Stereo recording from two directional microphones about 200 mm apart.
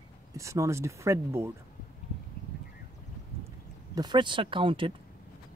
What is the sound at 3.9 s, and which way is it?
Speech, 20° right (ahead or behind).